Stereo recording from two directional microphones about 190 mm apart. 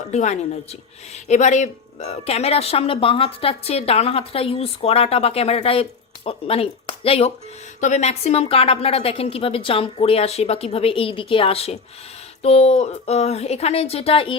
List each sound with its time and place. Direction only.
0.1 s speech: 35° left (ahead or behind)